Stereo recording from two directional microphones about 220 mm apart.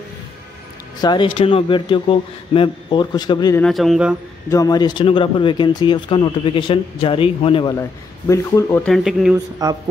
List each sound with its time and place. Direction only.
1.0 s speech: 20° left (ahead or behind)
3.6 s speech: centre (ahead or behind)
4.5 s speech: 15° left (ahead or behind)
8.3 s speech: 15° left (ahead or behind)
8.8 s speech: centre (ahead or behind)
9.6 s a man's voice: 15° right (ahead or behind)